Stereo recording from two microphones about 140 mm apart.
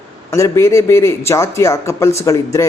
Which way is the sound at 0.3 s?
20° left (ahead or behind).